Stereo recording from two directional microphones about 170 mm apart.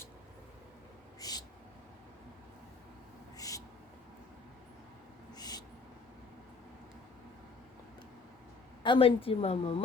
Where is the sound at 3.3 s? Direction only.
20° left (ahead or behind).